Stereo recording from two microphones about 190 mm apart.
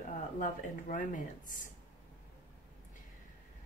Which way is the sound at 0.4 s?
40° left (ahead or behind).